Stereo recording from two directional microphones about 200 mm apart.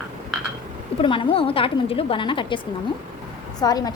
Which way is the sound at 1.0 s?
25° left (ahead or behind).